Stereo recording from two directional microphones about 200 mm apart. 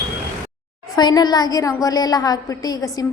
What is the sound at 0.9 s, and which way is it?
A woman's voice, 20° left (ahead or behind).